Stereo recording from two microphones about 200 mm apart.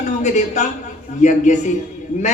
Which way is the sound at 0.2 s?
35° left (ahead or behind).